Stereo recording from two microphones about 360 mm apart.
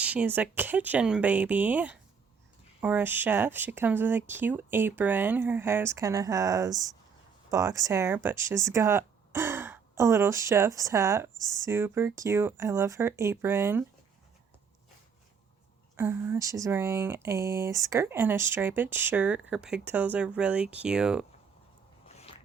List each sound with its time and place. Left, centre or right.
0.0 s speech: centre
16.0 s speech: centre
22.0 s a sound: centre